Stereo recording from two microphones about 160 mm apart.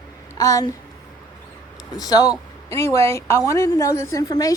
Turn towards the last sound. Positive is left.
turn(degrees=20)  # may be behind; listen again after turning